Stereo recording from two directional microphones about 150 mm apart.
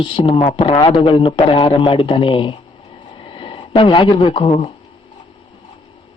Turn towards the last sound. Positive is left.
turn(degrees=35)  # may be behind; listen again after turning